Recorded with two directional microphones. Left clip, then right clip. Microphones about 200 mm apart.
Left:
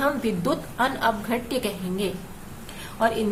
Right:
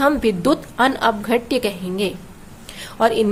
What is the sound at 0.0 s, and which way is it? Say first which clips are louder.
A woman's voice: right 8 dB; 35° right (ahead or behind).